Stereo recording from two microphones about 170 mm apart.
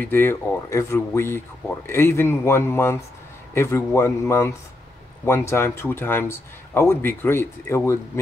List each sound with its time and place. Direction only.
0.0 s speech: 10° left (ahead or behind)
5.5 s speech: 15° left (ahead or behind)